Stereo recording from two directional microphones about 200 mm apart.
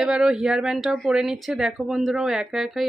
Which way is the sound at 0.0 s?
5° right (ahead or behind).